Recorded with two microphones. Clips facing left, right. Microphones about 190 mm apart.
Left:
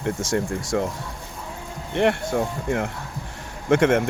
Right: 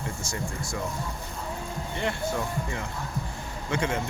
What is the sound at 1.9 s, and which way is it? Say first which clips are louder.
Speech: left 9 dB; 70° left (ahead or behind).